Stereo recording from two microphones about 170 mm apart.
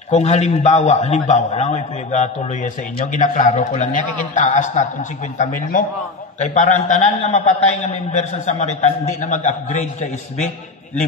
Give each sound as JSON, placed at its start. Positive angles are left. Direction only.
{"t": 0.1, "sound": "a man's voice", "side_deg": 40}
{"t": 6.4, "sound": "a man's voice", "side_deg": 45}